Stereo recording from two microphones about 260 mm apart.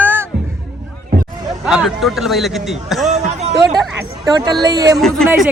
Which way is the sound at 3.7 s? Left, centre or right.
Centre.